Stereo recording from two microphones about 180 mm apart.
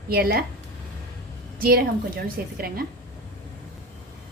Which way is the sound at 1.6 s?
55° right (ahead or behind).